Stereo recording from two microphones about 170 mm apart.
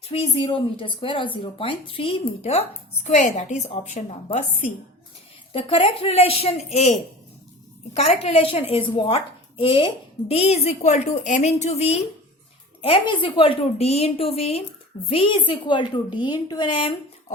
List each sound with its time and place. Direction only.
0.1 s speech: 30° left (ahead or behind)
5.5 s speech: 35° left (ahead or behind)
7.9 s a woman's voice: 40° left (ahead or behind)